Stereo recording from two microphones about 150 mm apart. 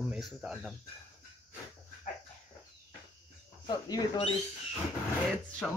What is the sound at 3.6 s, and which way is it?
Speech, 35° left (ahead or behind).